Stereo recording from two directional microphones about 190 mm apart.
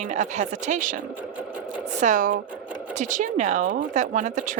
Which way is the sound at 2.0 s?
45° right (ahead or behind).